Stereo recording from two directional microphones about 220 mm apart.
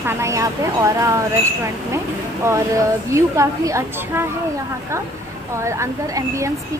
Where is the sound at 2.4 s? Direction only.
15° right (ahead or behind).